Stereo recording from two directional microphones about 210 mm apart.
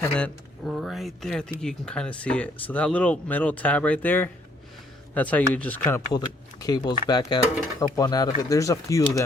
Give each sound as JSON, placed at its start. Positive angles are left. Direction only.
{"t": 0.0, "sound": "speech", "side_deg": 5}